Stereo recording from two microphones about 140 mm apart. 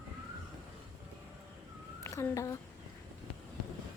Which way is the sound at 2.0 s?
20° left (ahead or behind).